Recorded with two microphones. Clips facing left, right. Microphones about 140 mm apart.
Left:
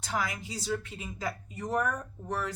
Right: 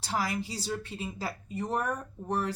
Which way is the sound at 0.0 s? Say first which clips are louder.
Right 2 dB; 30° right (ahead or behind).